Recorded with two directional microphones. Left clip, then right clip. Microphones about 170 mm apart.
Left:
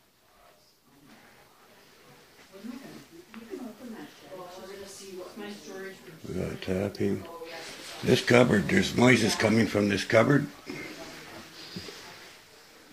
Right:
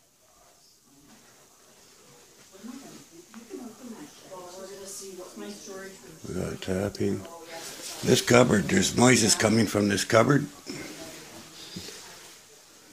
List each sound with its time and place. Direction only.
6.3 s speech: 15° right (ahead or behind)
8.1 s speech: 15° right (ahead or behind)